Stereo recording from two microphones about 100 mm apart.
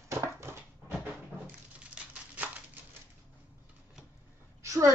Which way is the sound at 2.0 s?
10° right (ahead or behind).